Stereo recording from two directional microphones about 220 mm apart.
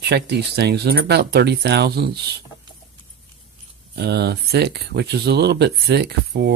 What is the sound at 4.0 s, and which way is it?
Speech, 50° right (ahead or behind).